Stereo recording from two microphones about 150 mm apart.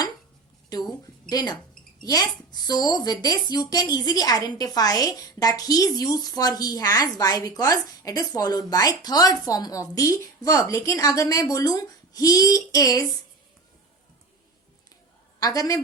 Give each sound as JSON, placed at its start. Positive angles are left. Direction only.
{"t": 0.7, "sound": "a sound", "side_deg": 25}
{"t": 1.3, "sound": "a woman's voice", "side_deg": 25}
{"t": 15.4, "sound": "a woman's voice", "side_deg": 25}